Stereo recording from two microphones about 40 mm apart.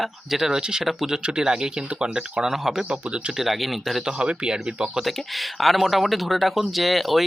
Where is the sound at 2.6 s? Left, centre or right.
Centre.